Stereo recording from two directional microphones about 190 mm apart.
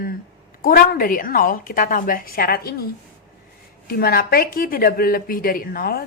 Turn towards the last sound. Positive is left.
turn(degrees=50)  # may be behind; listen again after turning